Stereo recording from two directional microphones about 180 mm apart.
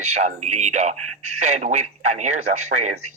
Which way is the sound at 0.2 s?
40° right (ahead or behind).